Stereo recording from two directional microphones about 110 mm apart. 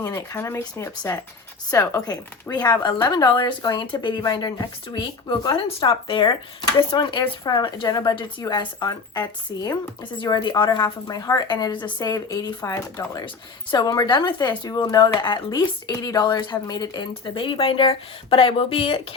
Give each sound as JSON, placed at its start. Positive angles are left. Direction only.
{"t": 0.0, "sound": "speech", "side_deg": 30}
{"t": 13.2, "sound": "speech", "side_deg": 45}